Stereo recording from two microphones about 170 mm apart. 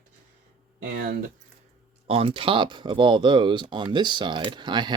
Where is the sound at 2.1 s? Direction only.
35° right (ahead or behind).